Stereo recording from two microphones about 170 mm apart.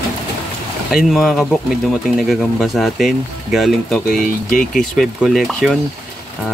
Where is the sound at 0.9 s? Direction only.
Centre (ahead or behind).